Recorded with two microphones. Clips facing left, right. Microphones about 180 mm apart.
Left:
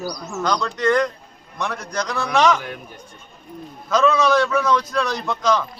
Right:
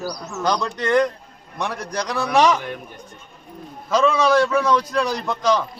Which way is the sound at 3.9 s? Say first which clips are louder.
Even; 10° right (ahead or behind).